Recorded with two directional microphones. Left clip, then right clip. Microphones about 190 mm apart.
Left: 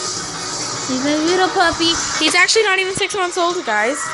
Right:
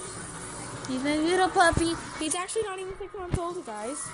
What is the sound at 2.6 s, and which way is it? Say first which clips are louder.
Speech: left 17 dB; 40° left (ahead or behind).